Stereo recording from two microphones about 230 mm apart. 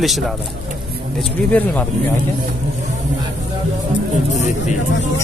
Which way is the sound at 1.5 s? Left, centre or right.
Centre.